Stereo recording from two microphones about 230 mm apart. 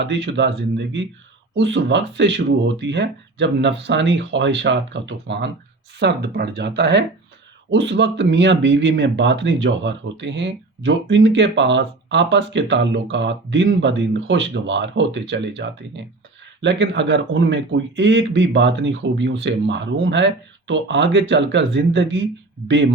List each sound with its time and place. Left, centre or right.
0.0 s speech: right